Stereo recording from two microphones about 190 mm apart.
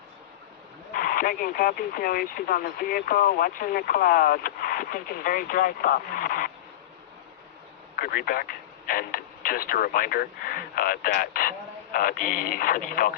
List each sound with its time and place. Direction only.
0.9 s speech: 50° left (ahead or behind)
7.9 s speech: 50° left (ahead or behind)